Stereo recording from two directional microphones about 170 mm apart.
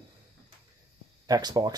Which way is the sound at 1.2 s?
25° right (ahead or behind).